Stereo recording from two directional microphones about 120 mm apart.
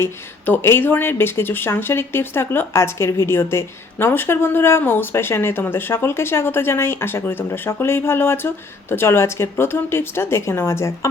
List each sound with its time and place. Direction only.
0.0 s speech: 20° left (ahead or behind)